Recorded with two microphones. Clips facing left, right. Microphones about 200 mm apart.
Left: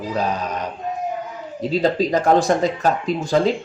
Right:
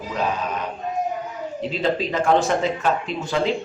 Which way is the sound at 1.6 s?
40° left (ahead or behind).